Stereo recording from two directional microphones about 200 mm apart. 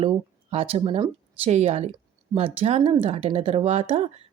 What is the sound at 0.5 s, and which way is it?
Speech, 30° right (ahead or behind).